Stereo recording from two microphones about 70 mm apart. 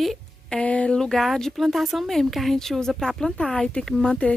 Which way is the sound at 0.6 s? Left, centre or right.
Centre.